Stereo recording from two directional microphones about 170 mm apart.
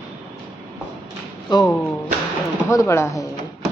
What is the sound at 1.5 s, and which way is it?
Speech, 25° left (ahead or behind).